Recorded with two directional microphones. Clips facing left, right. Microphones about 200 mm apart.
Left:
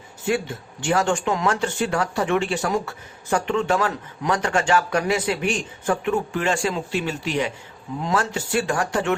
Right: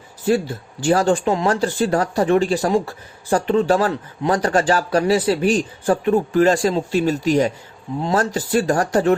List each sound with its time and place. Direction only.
0.3 s speech: 35° right (ahead or behind)